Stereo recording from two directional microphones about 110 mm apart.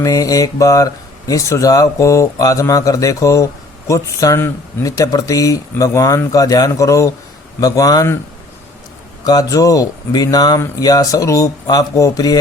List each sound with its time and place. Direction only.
0.0 s speech: 35° left (ahead or behind)
9.2 s speech: 35° left (ahead or behind)